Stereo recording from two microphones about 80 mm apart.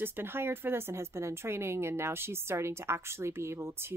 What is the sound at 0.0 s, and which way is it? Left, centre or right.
A woman's voice, right.